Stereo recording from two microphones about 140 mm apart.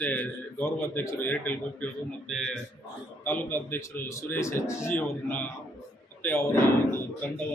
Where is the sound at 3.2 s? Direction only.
15° left (ahead or behind).